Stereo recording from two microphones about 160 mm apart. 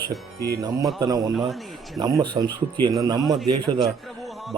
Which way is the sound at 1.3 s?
Centre (ahead or behind).